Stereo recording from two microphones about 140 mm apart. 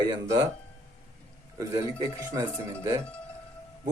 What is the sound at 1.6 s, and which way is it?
Speech, 25° right (ahead or behind).